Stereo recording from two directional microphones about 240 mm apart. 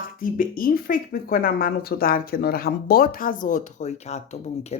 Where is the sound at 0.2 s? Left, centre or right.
Left.